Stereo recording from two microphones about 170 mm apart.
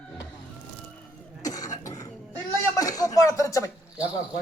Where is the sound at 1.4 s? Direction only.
20° left (ahead or behind).